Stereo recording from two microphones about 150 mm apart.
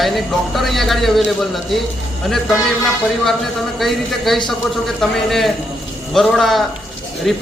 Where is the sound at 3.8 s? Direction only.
Centre (ahead or behind).